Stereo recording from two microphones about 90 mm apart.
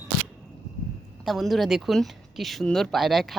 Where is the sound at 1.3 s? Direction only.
Centre (ahead or behind).